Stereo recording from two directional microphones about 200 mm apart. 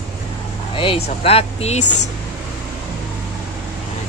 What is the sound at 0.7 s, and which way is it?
Speech, 30° left (ahead or behind).